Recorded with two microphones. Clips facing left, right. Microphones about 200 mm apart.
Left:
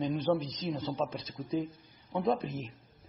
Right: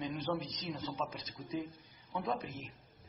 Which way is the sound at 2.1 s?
30° left (ahead or behind).